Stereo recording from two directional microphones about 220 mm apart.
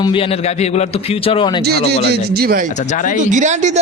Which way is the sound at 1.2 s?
25° left (ahead or behind).